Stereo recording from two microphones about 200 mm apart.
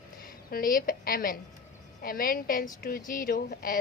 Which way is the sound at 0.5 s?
45° left (ahead or behind).